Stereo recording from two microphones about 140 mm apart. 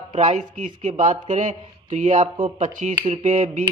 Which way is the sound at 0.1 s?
60° right (ahead or behind).